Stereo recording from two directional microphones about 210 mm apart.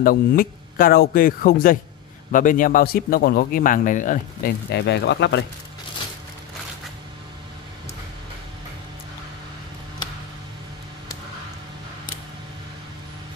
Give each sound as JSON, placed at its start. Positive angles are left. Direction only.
{"t": 0.0, "sound": "speech", "side_deg": 45}